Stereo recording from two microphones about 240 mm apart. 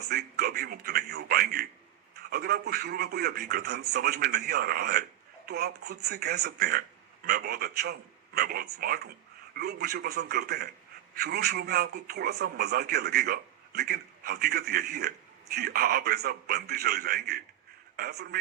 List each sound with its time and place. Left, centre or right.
0.1 s a man's voice: right